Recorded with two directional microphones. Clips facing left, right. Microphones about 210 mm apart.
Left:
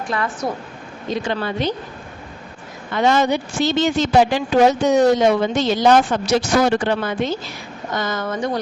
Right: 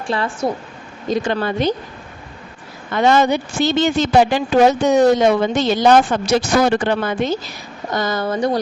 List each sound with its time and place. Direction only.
0.1 s a woman's voice: 30° right (ahead or behind)
1.1 s speech: 45° right (ahead or behind)
2.9 s speech: 55° right (ahead or behind)
7.9 s speech: 35° right (ahead or behind)